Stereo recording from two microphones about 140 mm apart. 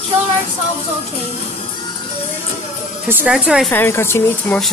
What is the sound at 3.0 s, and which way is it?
Speech, 15° right (ahead or behind).